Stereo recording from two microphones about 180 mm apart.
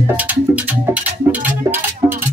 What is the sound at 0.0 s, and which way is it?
Music, 10° right (ahead or behind).